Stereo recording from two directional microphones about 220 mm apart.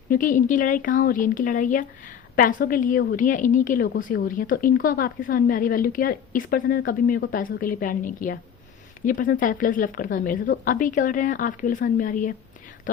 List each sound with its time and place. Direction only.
0.1 s a woman's voice: 35° left (ahead or behind)